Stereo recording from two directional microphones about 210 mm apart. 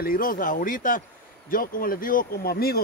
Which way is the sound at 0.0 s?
45° left (ahead or behind).